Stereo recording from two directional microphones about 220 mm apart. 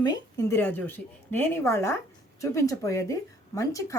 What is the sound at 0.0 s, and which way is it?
A woman's voice, 15° left (ahead or behind).